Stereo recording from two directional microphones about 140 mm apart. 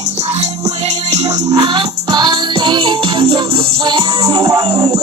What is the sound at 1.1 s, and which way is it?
Music, 55° right (ahead or behind).